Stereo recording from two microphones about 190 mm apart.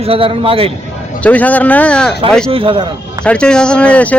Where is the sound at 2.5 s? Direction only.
25° right (ahead or behind).